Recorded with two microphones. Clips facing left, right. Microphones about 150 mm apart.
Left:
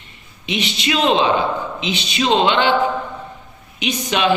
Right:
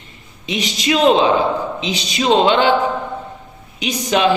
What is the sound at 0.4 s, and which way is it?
A woman's voice, 35° right (ahead or behind).